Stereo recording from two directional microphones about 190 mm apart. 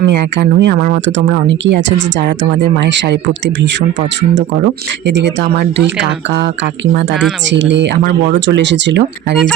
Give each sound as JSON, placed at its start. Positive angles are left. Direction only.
{"t": 0.0, "sound": "speech", "side_deg": -65}
{"t": 1.5, "sound": "speech", "side_deg": -70}